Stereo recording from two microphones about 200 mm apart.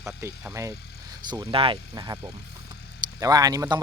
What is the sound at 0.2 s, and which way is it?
Speech, 15° right (ahead or behind).